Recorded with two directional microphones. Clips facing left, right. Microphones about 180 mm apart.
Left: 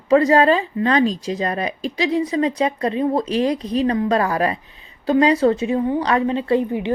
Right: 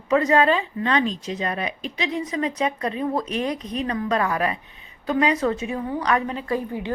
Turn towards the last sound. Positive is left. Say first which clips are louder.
# left 7 dB
turn(degrees=20)  # may be behind; listen again after turning